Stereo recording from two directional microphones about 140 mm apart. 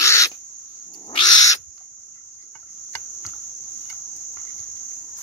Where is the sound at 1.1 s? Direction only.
35° left (ahead or behind).